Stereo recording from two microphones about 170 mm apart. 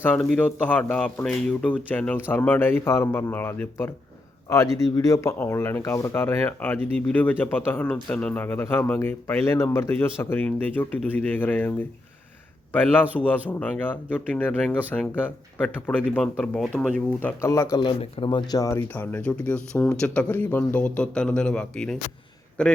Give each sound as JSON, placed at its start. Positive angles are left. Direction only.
{"t": 0.0, "sound": "a man's voice", "side_deg": 10}
{"t": 12.7, "sound": "a man's voice", "side_deg": 10}
{"t": 17.2, "sound": "a man's voice", "side_deg": 15}
{"t": 17.8, "sound": "speech", "side_deg": 30}
{"t": 18.9, "sound": "a man's voice", "side_deg": 10}